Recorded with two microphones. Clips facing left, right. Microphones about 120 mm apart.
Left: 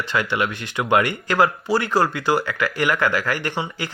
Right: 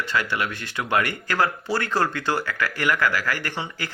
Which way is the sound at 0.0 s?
20° left (ahead or behind).